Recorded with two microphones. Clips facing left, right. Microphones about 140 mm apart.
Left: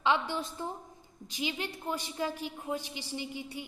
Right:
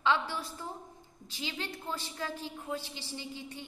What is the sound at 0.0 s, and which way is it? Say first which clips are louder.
A woman's voice: left 1 dB; 20° left (ahead or behind).